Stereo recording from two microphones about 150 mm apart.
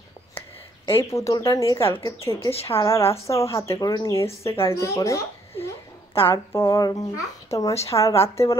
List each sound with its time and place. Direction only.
1.1 s a woman's voice: 20° left (ahead or behind)
2.5 s a woman's voice: 40° left (ahead or behind)
3.3 s a woman's voice: 20° left (ahead or behind)